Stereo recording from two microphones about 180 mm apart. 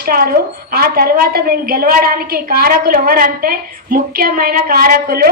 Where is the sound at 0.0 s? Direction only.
55° right (ahead or behind).